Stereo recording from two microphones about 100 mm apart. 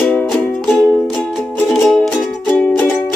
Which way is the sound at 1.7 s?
Centre (ahead or behind).